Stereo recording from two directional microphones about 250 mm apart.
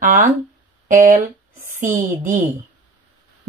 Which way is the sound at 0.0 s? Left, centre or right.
Right.